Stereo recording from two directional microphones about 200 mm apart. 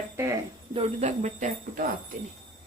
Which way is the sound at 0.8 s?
35° right (ahead or behind).